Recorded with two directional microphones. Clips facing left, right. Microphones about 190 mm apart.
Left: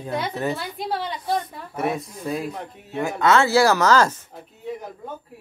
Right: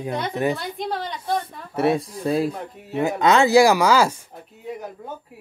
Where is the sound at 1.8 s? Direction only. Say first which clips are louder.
Right 5 dB; 30° right (ahead or behind).